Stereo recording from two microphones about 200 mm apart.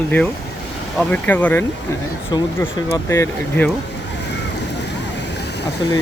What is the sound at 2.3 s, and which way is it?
Speech, 20° left (ahead or behind).